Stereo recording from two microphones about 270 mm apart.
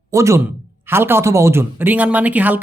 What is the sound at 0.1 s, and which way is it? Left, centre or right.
Speech, centre.